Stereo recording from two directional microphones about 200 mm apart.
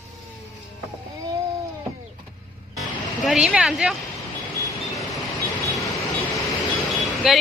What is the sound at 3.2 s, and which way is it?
Speech, 5° right (ahead or behind).